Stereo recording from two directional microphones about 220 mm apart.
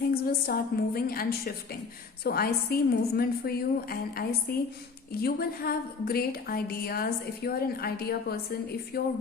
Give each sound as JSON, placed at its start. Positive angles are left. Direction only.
{"t": 0.1, "sound": "a woman's voice", "side_deg": 45}